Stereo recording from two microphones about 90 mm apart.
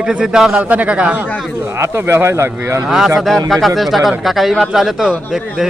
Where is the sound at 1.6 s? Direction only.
25° right (ahead or behind).